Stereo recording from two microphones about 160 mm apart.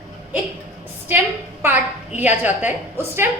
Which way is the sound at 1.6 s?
10° right (ahead or behind).